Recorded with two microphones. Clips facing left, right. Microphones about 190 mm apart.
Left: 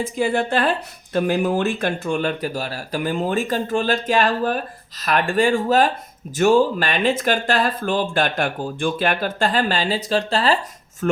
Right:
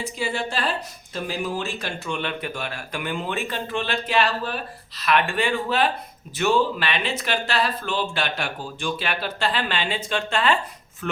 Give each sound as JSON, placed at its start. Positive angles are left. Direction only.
{"t": 0.2, "sound": "speech", "side_deg": 55}